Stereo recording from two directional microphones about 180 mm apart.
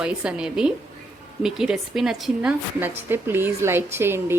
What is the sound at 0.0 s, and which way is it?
A woman's voice, 5° right (ahead or behind).